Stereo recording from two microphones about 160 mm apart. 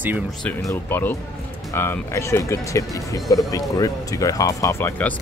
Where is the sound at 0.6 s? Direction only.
15° left (ahead or behind).